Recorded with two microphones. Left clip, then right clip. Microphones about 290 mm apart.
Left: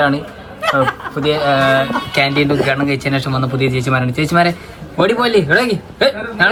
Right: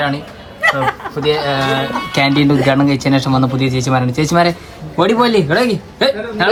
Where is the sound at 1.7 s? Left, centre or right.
Right.